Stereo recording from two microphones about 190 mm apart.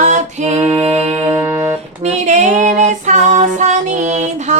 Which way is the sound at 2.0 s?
35° right (ahead or behind).